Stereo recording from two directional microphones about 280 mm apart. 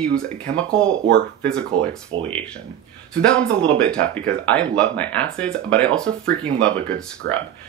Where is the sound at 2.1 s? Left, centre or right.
Centre.